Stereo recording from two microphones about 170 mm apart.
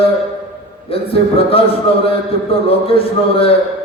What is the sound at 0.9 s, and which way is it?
A man's voice, 35° left (ahead or behind).